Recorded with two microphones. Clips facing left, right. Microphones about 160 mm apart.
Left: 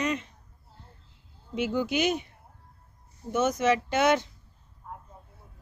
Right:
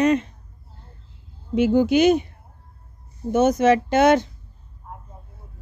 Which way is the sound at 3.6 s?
50° right (ahead or behind).